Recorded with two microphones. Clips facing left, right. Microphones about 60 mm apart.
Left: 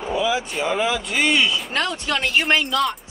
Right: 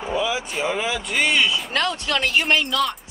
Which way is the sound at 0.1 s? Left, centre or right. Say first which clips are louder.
Left 2 dB; centre.